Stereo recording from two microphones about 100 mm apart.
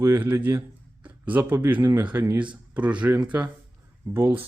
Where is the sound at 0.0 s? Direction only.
25° right (ahead or behind).